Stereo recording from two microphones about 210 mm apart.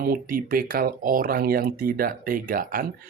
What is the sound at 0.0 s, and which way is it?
Speech, 45° right (ahead or behind).